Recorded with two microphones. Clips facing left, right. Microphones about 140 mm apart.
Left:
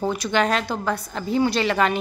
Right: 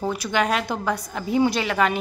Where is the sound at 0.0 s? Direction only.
5° right (ahead or behind).